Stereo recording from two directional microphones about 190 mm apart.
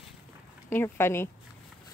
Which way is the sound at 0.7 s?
10° left (ahead or behind).